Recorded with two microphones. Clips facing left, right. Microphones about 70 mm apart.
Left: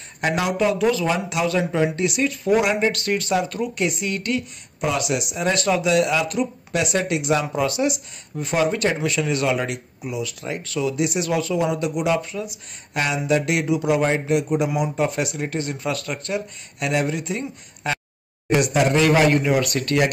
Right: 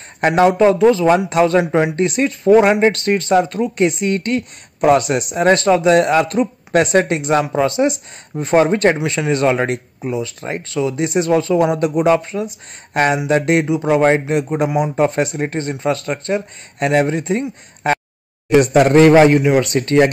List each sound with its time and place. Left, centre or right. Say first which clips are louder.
0.4 s speech: right 10 dB; right
1.1 s speech: right 9 dB; right